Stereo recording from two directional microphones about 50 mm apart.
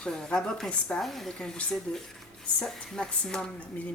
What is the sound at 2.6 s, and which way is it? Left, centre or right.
Speech, centre.